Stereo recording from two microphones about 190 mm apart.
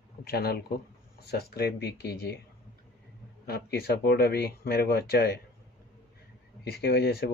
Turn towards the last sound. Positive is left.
turn(degrees=60)  # may be behind; listen again after turning